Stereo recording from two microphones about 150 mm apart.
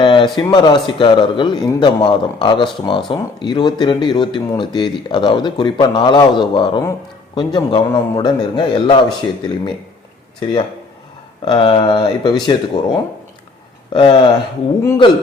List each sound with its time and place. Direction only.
0.0 s a sound: 35° left (ahead or behind)
0.3 s speech: 30° left (ahead or behind)
11.4 s speech: 35° left (ahead or behind)